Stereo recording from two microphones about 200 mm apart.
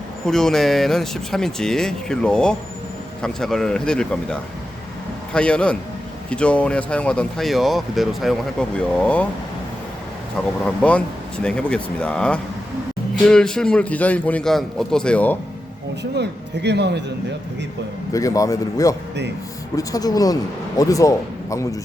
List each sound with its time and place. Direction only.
0.3 s speech: centre (ahead or behind)
10.8 s a man's voice: 5° left (ahead or behind)
16.1 s speech: 55° right (ahead or behind)
18.1 s a man's voice: 15° left (ahead or behind)